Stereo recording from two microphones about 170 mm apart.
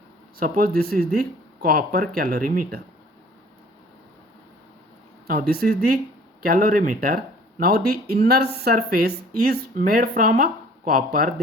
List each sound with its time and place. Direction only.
0.3 s speech: 55° right (ahead or behind)
5.3 s speech: 60° right (ahead or behind)
7.6 s speech: 65° right (ahead or behind)